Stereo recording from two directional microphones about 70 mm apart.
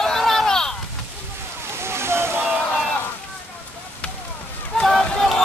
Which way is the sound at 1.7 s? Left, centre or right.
Right.